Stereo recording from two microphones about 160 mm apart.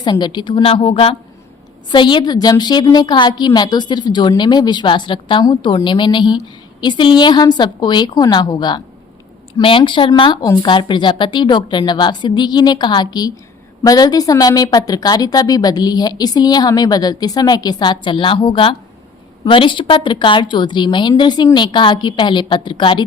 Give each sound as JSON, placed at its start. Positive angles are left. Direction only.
{"t": 0.0, "sound": "a woman's voice", "side_deg": 25}